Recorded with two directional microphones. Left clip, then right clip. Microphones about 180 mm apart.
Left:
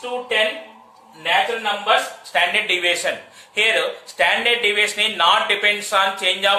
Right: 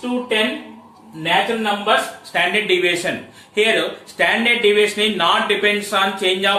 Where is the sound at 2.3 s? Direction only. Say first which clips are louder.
Right 1 dB; 25° left (ahead or behind).